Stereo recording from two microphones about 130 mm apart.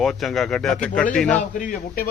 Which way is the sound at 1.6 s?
90° left.